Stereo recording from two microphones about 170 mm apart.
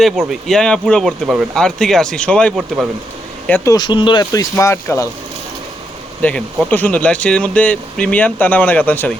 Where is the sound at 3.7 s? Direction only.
25° left (ahead or behind).